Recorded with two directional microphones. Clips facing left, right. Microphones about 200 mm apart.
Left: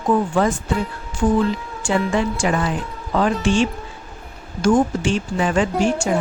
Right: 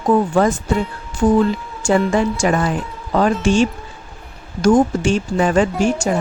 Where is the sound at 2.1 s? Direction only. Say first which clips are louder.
Right 3 dB; 45° right (ahead or behind).